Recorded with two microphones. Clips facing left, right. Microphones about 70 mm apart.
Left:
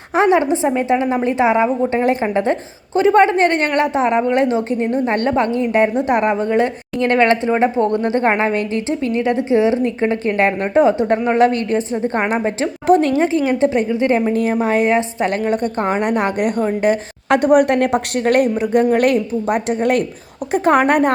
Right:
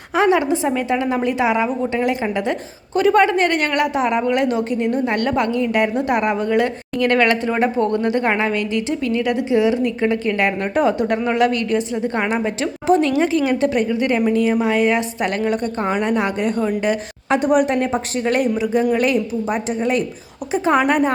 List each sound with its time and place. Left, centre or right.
0.1 s a woman's voice: left
16.4 s a woman's voice: left